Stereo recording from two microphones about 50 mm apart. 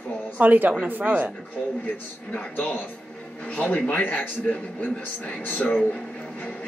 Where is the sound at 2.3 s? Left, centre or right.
Left.